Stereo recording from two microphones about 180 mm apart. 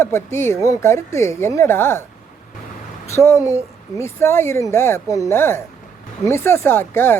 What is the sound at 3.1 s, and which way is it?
Speech, 15° left (ahead or behind).